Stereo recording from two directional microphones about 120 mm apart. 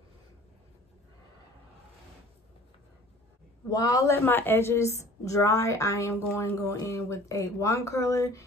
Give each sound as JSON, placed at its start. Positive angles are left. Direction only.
{"t": 3.7, "sound": "speech", "side_deg": 30}